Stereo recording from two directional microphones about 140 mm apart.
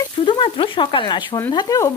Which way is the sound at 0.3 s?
35° left (ahead or behind).